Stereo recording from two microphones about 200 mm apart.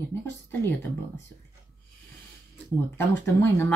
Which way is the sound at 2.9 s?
10° left (ahead or behind).